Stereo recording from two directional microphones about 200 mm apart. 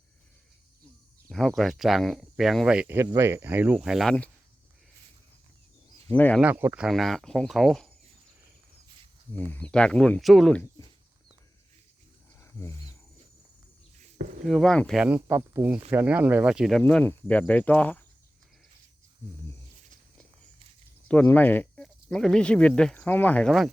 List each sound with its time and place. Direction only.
1.3 s speech: centre (ahead or behind)
6.1 s speech: 10° left (ahead or behind)
6.4 s speech: 10° right (ahead or behind)
9.3 s speech: 10° left (ahead or behind)
12.4 s wild animals: 15° left (ahead or behind)
14.4 s speech: centre (ahead or behind)
21.1 s speech: 10° left (ahead or behind)